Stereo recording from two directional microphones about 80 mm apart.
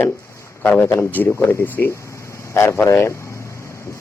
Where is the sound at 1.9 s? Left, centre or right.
Left.